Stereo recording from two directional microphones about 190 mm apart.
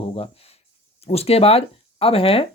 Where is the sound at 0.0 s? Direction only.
30° left (ahead or behind).